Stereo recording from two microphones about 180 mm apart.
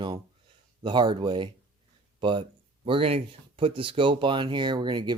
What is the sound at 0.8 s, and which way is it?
Speech, 25° right (ahead or behind).